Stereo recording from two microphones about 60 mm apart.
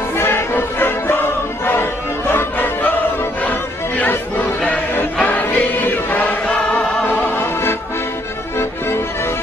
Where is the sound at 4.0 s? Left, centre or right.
Left.